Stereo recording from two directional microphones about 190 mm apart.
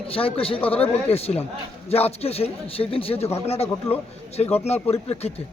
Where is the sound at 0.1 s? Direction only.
30° left (ahead or behind).